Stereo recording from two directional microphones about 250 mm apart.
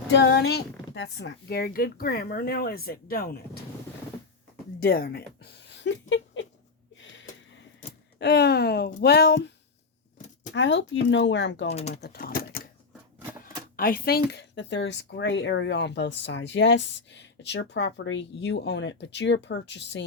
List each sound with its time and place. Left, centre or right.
0.1 s speech: left
4.8 s a sound: left
6.9 s gasp: left
8.2 s speech: left
10.5 s speech: left
11.7 s speech: left
12.0 s a sound: left
13.4 s speech: left